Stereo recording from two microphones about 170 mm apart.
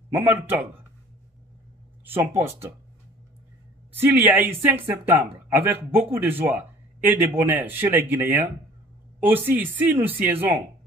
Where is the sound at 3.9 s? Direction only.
15° right (ahead or behind).